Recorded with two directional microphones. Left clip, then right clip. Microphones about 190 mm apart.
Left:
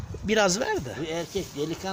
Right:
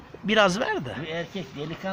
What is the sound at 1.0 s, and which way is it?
Speech, 75° left (ahead or behind).